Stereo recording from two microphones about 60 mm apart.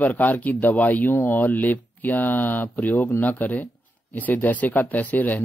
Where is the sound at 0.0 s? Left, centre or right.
Left.